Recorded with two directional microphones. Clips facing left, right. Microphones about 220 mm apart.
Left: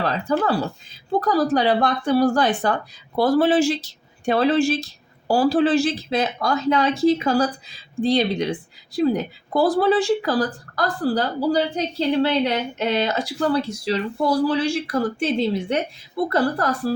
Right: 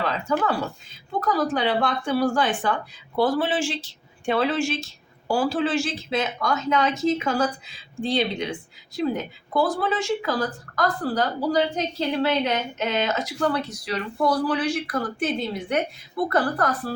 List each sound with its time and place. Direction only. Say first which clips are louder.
0.0 s a woman's voice: left 3 dB; 35° left (ahead or behind)